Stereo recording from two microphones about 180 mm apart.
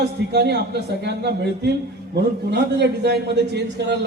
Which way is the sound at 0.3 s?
65° right (ahead or behind).